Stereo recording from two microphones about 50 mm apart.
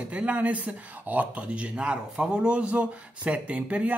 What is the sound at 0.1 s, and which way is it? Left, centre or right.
Speech, right.